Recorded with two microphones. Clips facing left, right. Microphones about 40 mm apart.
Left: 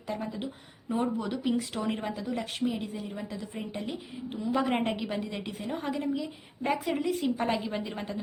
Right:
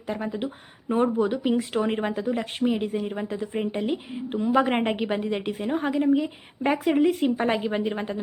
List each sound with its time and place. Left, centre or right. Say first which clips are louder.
0.1 s a woman's voice: right 5 dB; right
2.6 s a woman's voice: right 11 dB; right
7.3 s a woman's voice: right 5 dB; right